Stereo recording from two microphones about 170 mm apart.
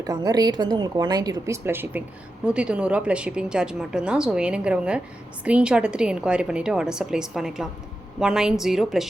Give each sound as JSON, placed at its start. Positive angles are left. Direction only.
{"t": 0.0, "sound": "a woman's voice", "side_deg": -20}